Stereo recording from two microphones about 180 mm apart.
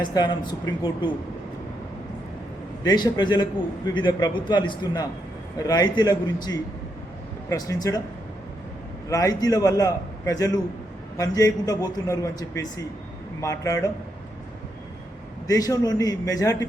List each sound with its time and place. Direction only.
0.0 s a man's voice: 25° left (ahead or behind)
2.8 s a man's voice: 25° left (ahead or behind)
9.0 s a man's voice: 20° left (ahead or behind)
15.4 s a man's voice: 20° left (ahead or behind)